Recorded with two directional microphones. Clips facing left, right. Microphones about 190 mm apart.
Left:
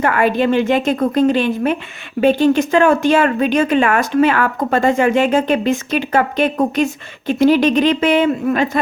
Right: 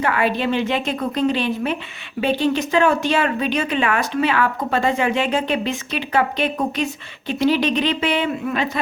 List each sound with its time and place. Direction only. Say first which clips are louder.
0.0 s speech: left 5 dB; 50° left (ahead or behind)